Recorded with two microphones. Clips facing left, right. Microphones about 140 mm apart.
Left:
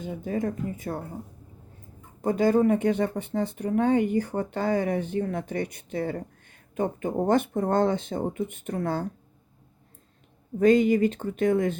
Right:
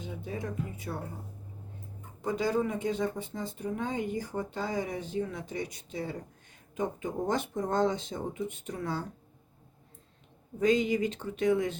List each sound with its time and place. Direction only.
0.0 s speech: 45° left (ahead or behind)
2.2 s speech: 55° left (ahead or behind)
10.6 s speech: 50° left (ahead or behind)